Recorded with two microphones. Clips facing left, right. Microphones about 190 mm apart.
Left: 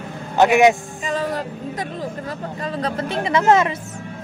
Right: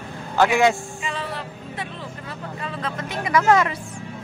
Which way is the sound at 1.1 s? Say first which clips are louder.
Left 8 dB; 45° left (ahead or behind).